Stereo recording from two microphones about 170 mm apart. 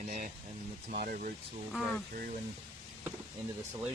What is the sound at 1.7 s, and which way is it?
Speech, centre (ahead or behind).